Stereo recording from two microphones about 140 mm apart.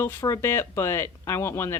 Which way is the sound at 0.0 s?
20° left (ahead or behind).